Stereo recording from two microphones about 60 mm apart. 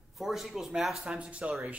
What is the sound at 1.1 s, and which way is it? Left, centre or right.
Speech, centre.